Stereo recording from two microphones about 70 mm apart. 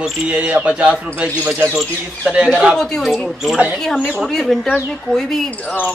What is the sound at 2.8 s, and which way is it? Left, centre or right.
Speech, centre.